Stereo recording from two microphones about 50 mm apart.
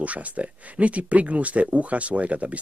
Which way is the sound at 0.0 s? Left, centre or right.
Right.